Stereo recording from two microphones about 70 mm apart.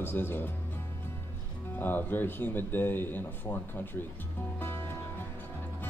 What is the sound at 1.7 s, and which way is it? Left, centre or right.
Speech, left.